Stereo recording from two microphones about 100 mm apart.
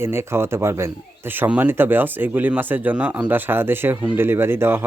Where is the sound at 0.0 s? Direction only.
25° right (ahead or behind).